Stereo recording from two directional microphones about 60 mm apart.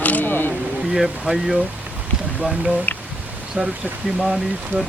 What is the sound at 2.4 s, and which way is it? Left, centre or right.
Speech, centre.